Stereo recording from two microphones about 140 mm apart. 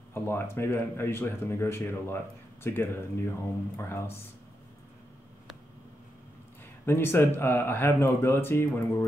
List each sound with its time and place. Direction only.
0.1 s speech: 15° left (ahead or behind)
6.9 s speech: 15° left (ahead or behind)